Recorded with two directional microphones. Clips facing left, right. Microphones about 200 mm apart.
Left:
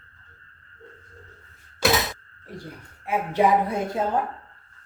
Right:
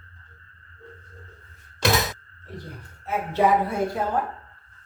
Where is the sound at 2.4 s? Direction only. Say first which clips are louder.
Even; 10° left (ahead or behind).